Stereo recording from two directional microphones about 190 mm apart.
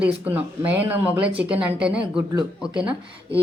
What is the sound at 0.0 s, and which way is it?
Speech, 10° right (ahead or behind).